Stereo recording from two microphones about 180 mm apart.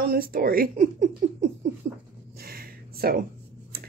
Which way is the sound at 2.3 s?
55° right (ahead or behind).